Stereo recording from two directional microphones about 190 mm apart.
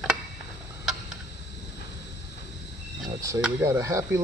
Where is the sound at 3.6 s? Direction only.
15° right (ahead or behind).